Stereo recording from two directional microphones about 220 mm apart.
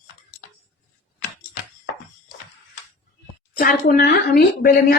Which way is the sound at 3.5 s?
40° left (ahead or behind).